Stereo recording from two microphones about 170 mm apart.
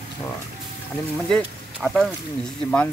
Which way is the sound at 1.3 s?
5° left (ahead or behind).